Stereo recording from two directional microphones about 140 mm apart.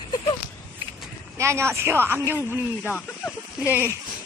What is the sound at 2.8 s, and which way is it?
Speech, 10° left (ahead or behind).